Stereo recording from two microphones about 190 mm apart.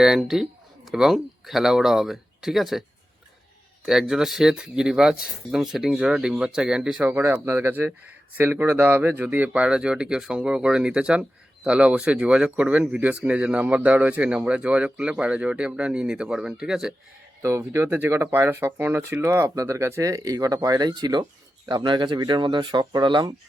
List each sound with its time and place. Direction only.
0.0 s speech: centre (ahead or behind)
3.8 s speech: 5° right (ahead or behind)
17.4 s speech: 15° right (ahead or behind)